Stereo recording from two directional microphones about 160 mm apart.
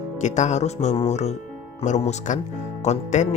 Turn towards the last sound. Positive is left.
turn(degrees=45)  # may be behind; listen again after turning